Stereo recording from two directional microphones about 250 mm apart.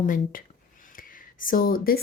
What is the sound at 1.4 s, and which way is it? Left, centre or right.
Speech, left.